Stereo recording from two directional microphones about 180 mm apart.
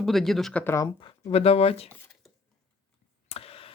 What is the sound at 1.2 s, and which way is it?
Speech, 35° left (ahead or behind).